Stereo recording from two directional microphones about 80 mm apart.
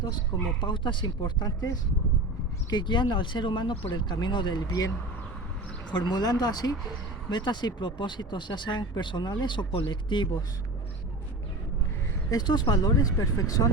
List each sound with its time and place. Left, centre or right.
0.6 s speech: left
2.6 s speech: left
5.9 s speech: left
7.3 s speech: left
12.3 s speech: left
13.1 s speech: left